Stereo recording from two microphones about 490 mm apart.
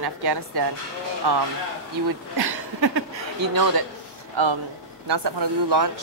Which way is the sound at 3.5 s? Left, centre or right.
Right.